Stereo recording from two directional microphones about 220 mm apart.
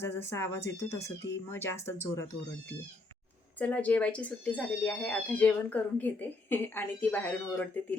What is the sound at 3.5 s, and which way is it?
Speech, 5° left (ahead or behind).